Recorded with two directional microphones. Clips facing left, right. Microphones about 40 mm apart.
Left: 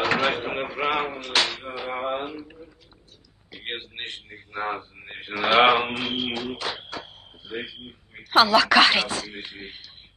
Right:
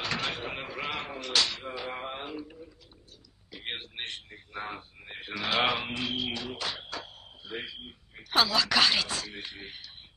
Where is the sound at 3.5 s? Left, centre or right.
Left.